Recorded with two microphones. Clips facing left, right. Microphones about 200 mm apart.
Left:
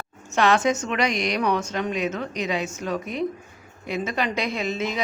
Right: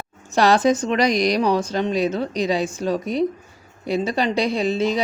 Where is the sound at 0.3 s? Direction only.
35° right (ahead or behind).